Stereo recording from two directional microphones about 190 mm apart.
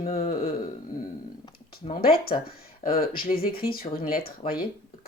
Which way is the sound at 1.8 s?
35° left (ahead or behind).